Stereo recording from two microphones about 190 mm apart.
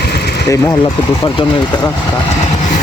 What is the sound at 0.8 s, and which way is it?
Speech, 25° left (ahead or behind).